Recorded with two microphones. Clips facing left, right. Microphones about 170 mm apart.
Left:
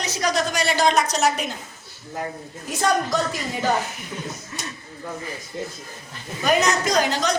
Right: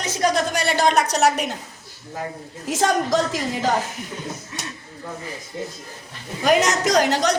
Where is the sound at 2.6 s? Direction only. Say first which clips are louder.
Right 2 dB; 90° right.